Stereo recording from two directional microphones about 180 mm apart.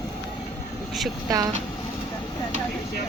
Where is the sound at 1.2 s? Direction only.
20° right (ahead or behind).